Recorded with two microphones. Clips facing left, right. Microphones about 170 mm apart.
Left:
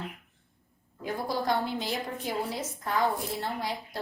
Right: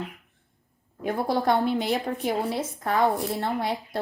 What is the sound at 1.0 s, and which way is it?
A woman's voice, 60° right (ahead or behind).